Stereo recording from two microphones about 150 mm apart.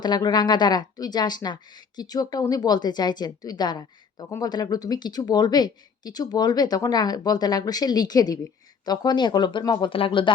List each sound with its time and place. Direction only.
0.0 s a woman's voice: 30° left (ahead or behind)